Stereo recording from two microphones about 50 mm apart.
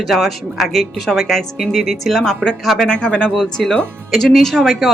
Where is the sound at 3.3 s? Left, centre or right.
Centre.